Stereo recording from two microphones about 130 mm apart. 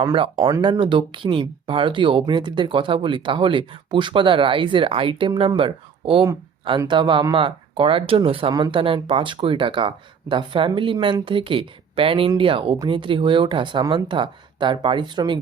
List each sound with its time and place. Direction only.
0.0 s speech: 40° right (ahead or behind)